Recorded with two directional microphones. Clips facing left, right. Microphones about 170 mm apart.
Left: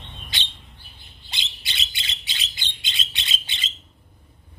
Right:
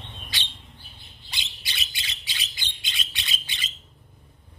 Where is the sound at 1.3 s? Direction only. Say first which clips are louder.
Left 2 dB; 25° left (ahead or behind).